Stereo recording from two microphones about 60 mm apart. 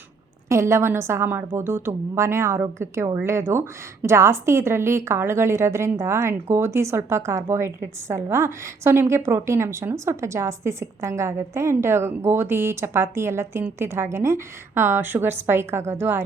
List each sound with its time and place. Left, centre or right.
0.4 s a woman's voice: right